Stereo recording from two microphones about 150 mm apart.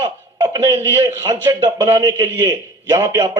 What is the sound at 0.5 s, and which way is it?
A man's voice, 20° right (ahead or behind).